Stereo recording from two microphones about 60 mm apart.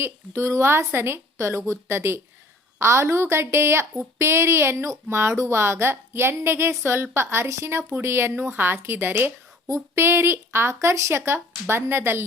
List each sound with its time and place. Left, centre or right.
0.0 s a woman's voice: right
9.6 s a woman's voice: right